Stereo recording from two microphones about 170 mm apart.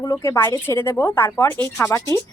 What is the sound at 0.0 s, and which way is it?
Speech, 20° left (ahead or behind).